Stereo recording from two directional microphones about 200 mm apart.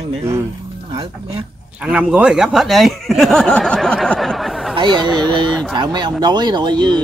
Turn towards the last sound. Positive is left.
turn(degrees=-20)  # may be behind; listen again after turning